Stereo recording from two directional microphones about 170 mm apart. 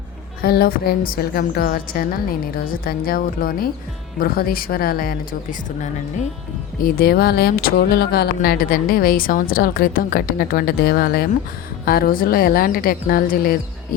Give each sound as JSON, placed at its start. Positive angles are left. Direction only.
{"t": 0.4, "sound": "speech", "side_deg": 65}
{"t": 6.8, "sound": "speech", "side_deg": 60}